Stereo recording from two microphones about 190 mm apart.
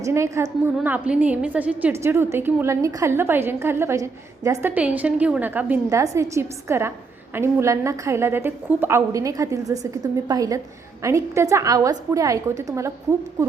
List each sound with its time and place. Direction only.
0.0 s a woman's voice: 15° right (ahead or behind)